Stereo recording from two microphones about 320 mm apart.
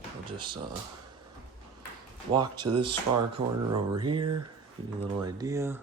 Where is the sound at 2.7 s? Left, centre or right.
Right.